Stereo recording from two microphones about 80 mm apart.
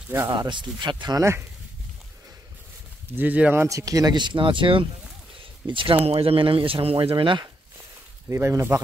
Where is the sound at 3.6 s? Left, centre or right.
Right.